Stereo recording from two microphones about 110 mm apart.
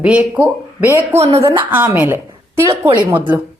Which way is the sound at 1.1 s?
70° right (ahead or behind).